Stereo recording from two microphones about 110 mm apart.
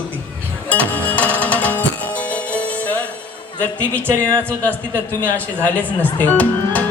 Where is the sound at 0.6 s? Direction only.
15° left (ahead or behind).